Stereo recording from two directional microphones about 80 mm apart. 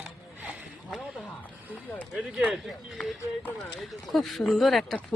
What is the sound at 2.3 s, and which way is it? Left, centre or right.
Speech, centre.